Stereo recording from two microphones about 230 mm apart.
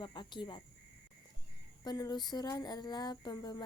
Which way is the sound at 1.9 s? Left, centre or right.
Centre.